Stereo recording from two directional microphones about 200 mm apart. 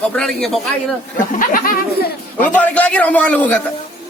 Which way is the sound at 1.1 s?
45° left (ahead or behind).